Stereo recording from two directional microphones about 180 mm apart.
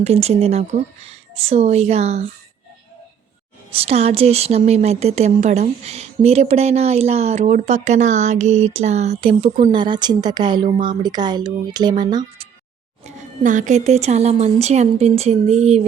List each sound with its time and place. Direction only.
0.0 s a woman's voice: 35° right (ahead or behind)
3.7 s a woman's voice: 35° right (ahead or behind)
13.1 s a woman's voice: 45° right (ahead or behind)